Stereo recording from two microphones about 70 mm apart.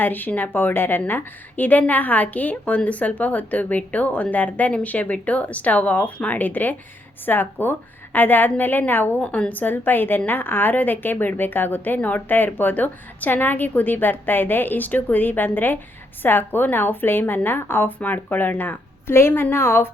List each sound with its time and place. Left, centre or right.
0.0 s a woman's voice: left